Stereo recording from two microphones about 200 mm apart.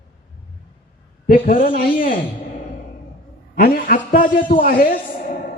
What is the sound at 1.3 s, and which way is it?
Speech, 45° left (ahead or behind).